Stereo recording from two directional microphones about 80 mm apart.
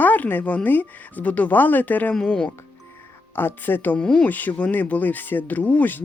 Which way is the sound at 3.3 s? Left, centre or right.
Left.